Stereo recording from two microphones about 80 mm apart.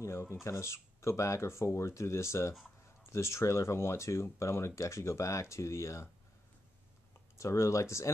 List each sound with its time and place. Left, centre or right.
0.0 s speech: left
7.3 s speech: left